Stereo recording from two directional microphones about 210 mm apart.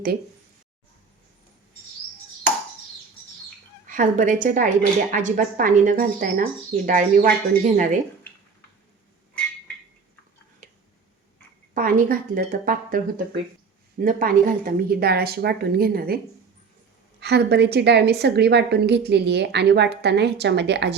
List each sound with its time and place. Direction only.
3.8 s speech: 40° right (ahead or behind)
11.7 s a woman's voice: 40° right (ahead or behind)